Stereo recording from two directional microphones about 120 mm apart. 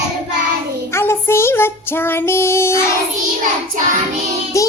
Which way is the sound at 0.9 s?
20° left (ahead or behind).